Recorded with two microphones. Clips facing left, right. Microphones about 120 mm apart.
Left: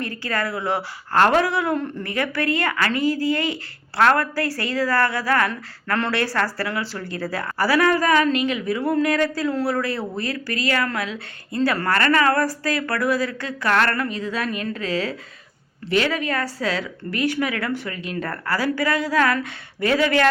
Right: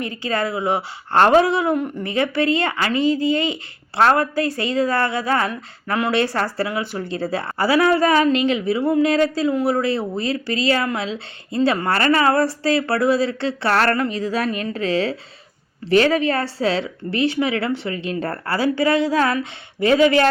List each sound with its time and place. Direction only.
0.0 s speech: 20° right (ahead or behind)
5.5 s speech: 10° right (ahead or behind)
6.1 s speech: 25° right (ahead or behind)